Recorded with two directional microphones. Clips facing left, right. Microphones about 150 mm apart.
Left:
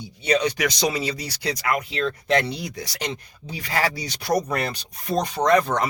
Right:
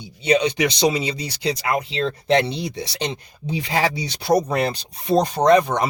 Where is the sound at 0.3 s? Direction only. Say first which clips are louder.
Right 3 dB; 20° right (ahead or behind).